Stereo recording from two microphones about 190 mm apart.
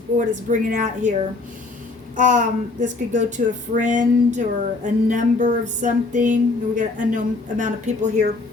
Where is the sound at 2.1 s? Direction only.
45° right (ahead or behind).